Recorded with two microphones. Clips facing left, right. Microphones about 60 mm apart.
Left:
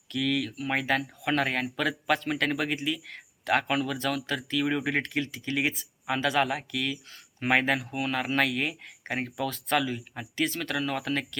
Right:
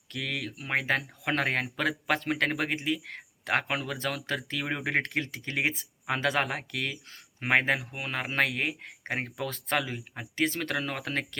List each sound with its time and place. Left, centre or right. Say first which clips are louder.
0.1 s speech: left 6 dB; right
7.3 s speech: left 1 dB; right